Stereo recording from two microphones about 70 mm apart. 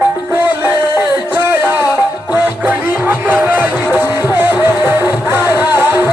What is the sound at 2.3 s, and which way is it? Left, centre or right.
Music, right.